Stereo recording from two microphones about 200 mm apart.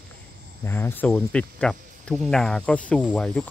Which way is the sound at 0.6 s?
10° left (ahead or behind).